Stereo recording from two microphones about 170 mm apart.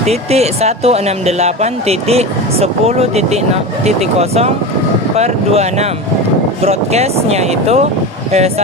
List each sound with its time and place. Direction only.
0.0 s speech: 40° right (ahead or behind)